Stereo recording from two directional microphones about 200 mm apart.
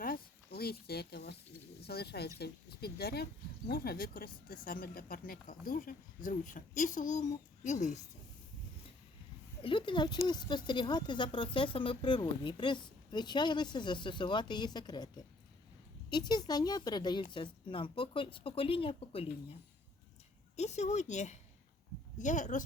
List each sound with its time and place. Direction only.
0.0 s a sound: 50° left (ahead or behind)
1.8 s speech: 55° left (ahead or behind); by 7.9 s 35° left (ahead or behind)
9.6 s a woman's voice: 25° left (ahead or behind)
20.6 s a woman's voice: 35° left (ahead or behind)